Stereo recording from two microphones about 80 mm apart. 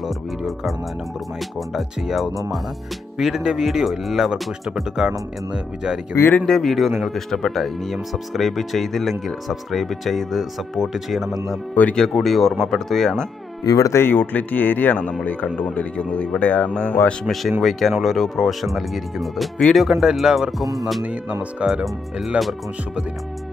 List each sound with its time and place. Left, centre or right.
0.4 s speech: centre
6.4 s speech: centre
13.7 s speech: left
13.9 s speech: left
17.2 s speech: centre
21.0 s speech: centre